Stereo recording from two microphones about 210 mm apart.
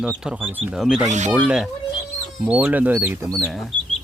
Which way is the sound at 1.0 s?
35° right (ahead or behind).